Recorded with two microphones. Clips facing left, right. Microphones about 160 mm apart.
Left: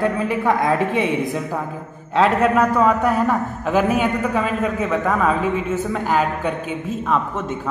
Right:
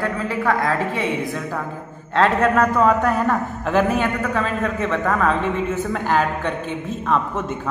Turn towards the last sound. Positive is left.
turn(degrees=0)  # may be behind; listen again after turning